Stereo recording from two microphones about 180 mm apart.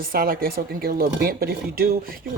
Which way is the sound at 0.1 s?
55° right (ahead or behind).